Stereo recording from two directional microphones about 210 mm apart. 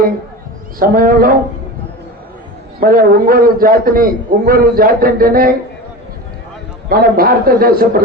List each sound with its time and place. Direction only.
0.8 s a man's voice: 45° right (ahead or behind)
2.8 s a man's voice: 45° right (ahead or behind)
6.8 s a man's voice: 45° right (ahead or behind)